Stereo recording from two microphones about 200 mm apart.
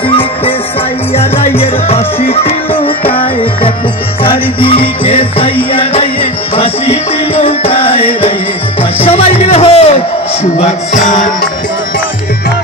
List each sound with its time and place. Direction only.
1.6 s music: 30° left (ahead or behind)
6.5 s music: 30° left (ahead or behind)